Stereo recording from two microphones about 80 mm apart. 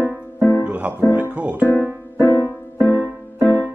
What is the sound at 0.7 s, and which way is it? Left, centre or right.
Music, centre.